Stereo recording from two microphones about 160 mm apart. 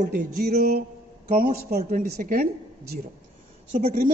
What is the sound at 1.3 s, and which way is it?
A woman's voice, 65° right (ahead or behind).